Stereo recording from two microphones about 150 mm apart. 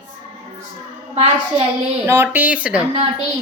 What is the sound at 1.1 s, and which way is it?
Speech, 45° right (ahead or behind).